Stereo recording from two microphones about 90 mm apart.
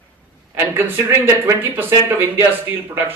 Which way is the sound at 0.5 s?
25° right (ahead or behind).